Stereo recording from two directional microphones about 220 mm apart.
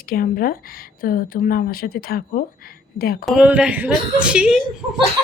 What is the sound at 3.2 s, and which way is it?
A woman's voice, 5° right (ahead or behind).